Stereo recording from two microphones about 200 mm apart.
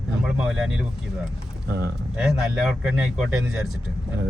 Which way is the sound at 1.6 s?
55° right (ahead or behind).